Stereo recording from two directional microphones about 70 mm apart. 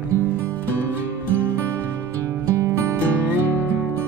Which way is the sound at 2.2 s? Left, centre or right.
Right.